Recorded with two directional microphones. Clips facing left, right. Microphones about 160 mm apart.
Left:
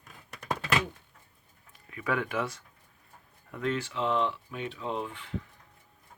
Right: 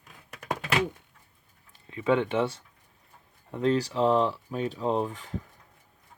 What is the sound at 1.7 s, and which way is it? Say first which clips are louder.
Speech: right 7 dB; 25° right (ahead or behind).